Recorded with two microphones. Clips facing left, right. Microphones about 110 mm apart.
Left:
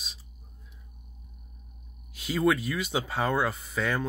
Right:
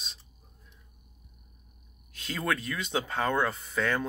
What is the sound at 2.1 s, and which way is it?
Speech, 10° left (ahead or behind).